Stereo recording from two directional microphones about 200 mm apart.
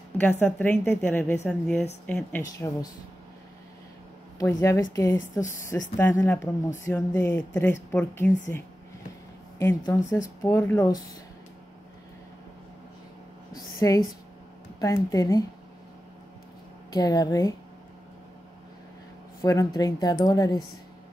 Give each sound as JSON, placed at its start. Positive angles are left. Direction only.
{"t": 0.2, "sound": "speech", "side_deg": 10}
{"t": 2.4, "sound": "speech", "side_deg": 15}
{"t": 4.4, "sound": "speech", "side_deg": 15}
{"t": 13.7, "sound": "speech", "side_deg": 15}
{"t": 15.0, "sound": "speech", "side_deg": 15}
{"t": 16.9, "sound": "speech", "side_deg": 20}
{"t": 19.4, "sound": "speech", "side_deg": 15}